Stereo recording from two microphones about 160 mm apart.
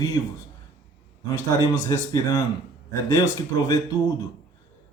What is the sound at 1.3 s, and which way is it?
Speech, 20° left (ahead or behind).